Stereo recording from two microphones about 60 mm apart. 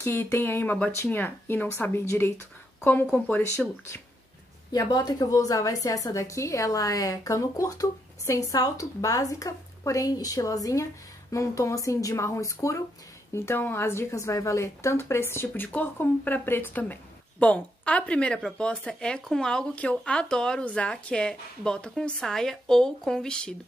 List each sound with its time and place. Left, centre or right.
0.0 s speech: left
3.6 s speech: centre
4.7 s a woman's voice: left
6.1 s a woman's voice: left
11.3 s speech: left
13.3 s speech: left
14.1 s speech: left
16.7 s a woman's voice: left; by 19.6 s centre
19.7 s a woman's voice: left